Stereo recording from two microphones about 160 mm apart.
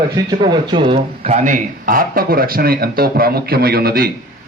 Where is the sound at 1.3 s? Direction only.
50° right (ahead or behind); by 4.1 s 70° right (ahead or behind).